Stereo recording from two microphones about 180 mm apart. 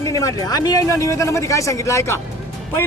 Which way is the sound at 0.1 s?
20° left (ahead or behind).